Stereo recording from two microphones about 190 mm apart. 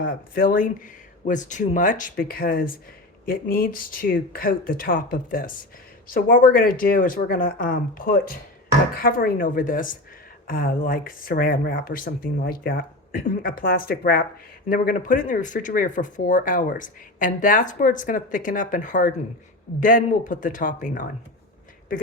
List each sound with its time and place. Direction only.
0.0 s speech: 45° left (ahead or behind)